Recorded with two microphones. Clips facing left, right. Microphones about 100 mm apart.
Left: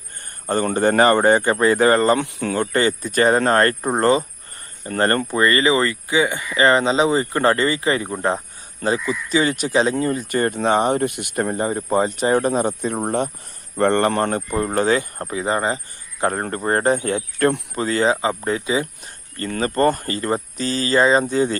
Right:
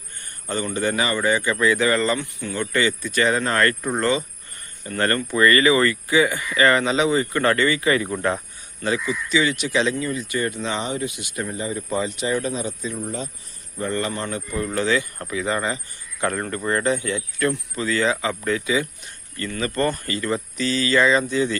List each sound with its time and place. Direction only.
0.4 s speech: 50° left (ahead or behind)
2.2 s speech: 55° left (ahead or behind)
2.7 s speech: 45° left (ahead or behind); by 8.4 s 25° left (ahead or behind)
8.8 s speech: 40° left (ahead or behind)